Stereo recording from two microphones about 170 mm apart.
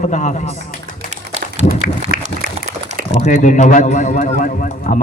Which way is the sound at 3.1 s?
45° left (ahead or behind).